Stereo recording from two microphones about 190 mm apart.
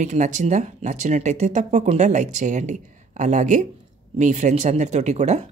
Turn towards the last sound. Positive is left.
turn(degrees=-35)  # may be behind; listen again after turning